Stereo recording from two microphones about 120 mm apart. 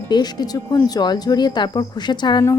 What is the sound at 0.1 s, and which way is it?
Speech, 35° left (ahead or behind).